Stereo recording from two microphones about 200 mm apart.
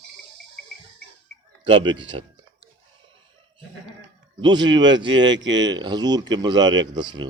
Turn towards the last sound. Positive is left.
turn(degrees=-20)  # may be behind; listen again after turning